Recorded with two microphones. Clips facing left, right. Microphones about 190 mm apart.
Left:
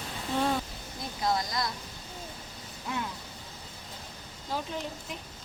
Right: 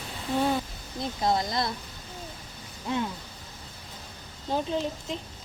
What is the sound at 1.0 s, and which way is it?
Speech, 25° right (ahead or behind).